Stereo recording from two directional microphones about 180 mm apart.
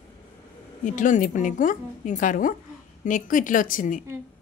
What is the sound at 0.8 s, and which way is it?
Speech, 45° left (ahead or behind).